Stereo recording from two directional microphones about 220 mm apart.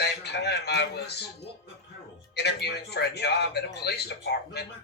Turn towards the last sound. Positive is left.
turn(degrees=50)  # may be behind; listen again after turning